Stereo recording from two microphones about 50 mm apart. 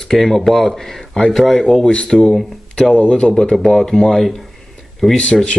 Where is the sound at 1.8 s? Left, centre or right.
Centre.